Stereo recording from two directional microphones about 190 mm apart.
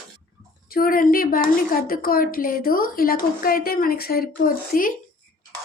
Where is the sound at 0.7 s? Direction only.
50° left (ahead or behind).